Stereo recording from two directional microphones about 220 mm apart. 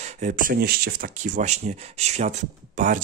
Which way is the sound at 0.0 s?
35° right (ahead or behind).